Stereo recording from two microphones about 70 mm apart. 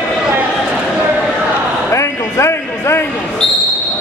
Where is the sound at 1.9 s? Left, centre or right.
Left.